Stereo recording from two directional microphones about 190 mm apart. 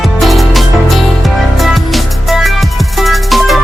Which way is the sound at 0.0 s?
Centre (ahead or behind).